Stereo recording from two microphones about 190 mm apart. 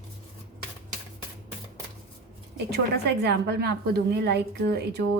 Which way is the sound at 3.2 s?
60° right (ahead or behind).